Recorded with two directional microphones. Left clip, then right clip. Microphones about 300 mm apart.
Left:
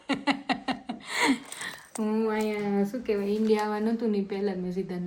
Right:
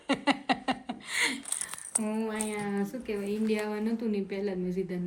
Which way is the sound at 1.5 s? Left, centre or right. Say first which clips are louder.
Left 1 dB; left.